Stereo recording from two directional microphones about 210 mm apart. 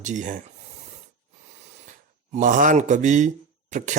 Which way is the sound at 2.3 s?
35° right (ahead or behind).